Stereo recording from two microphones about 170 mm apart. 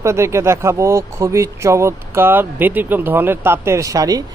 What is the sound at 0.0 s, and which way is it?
Speech, 15° right (ahead or behind).